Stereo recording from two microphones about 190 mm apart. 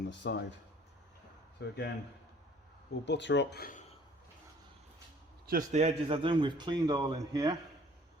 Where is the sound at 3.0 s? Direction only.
70° left (ahead or behind); by 3.8 s 50° left (ahead or behind).